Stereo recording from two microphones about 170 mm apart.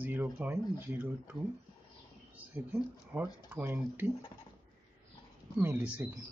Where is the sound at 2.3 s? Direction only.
10° right (ahead or behind).